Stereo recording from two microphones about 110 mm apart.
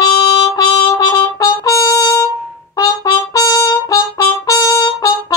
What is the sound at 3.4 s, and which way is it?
Trumpet, 30° left (ahead or behind).